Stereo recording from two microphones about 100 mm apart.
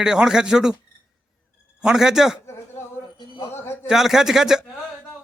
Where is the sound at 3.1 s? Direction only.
55° left (ahead or behind).